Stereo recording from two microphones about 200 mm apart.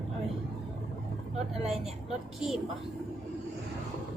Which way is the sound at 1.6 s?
Centre (ahead or behind).